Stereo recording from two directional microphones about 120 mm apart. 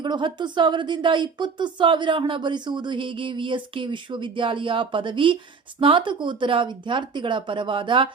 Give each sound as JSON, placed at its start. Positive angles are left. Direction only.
{"t": 0.0, "sound": "a woman's voice", "side_deg": -40}